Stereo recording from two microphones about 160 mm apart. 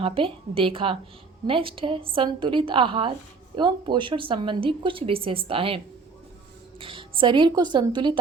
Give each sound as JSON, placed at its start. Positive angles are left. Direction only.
{"t": 0.0, "sound": "a woman's voice", "side_deg": -35}